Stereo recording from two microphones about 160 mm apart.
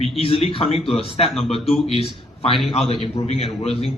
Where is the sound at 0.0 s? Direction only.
35° left (ahead or behind).